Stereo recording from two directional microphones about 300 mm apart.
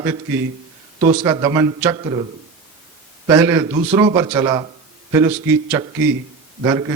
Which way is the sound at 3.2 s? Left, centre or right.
Centre.